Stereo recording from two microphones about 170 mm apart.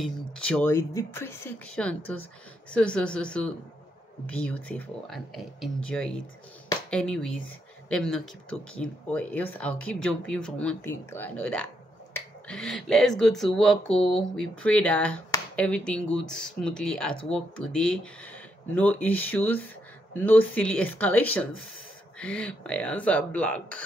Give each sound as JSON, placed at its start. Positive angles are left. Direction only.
{"t": 0.0, "sound": "speech", "side_deg": 5}
{"t": 13.9, "sound": "speech", "side_deg": 30}
{"t": 14.3, "sound": "speech", "side_deg": 5}